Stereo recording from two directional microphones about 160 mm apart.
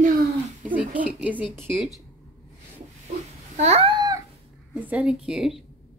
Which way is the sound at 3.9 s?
25° right (ahead or behind).